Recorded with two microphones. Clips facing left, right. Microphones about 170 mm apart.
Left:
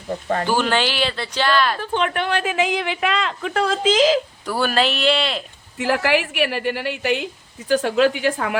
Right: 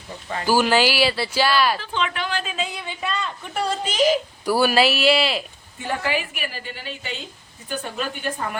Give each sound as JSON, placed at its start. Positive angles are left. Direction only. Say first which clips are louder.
{"t": 0.1, "sound": "speech", "louder": "left 8 dB", "side_deg": 50}
{"t": 0.4, "sound": "speech", "louder": "right 4 dB", "side_deg": -5}
{"t": 1.8, "sound": "a woman's voice", "louder": "left 5 dB", "side_deg": 55}
{"t": 4.4, "sound": "speech", "louder": "right 4 dB", "side_deg": -10}
{"t": 5.7, "sound": "a woman's voice", "louder": "left 6 dB", "side_deg": 80}
{"t": 7.7, "sound": "a woman's voice", "louder": "left 12 dB", "side_deg": 90}